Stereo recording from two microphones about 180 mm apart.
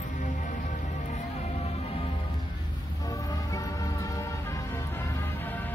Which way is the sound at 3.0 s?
20° left (ahead or behind).